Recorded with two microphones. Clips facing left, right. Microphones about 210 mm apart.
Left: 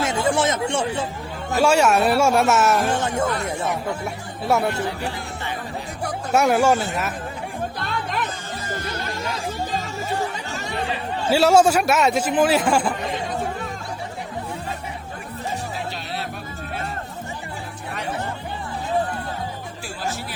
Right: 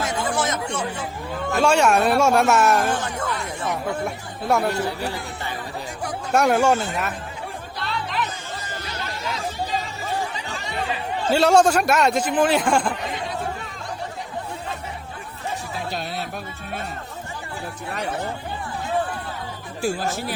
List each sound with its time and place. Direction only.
0.0 s speech: 25° left (ahead or behind)
1.6 s a man's voice: 5° left (ahead or behind)
2.9 s speech: 25° left (ahead or behind)
4.0 s a man's voice: 5° left (ahead or behind)
6.3 s a man's voice: 5° left (ahead or behind)
7.8 s music: 50° left (ahead or behind)
11.3 s a man's voice: 5° left (ahead or behind)
19.8 s speech: 45° right (ahead or behind)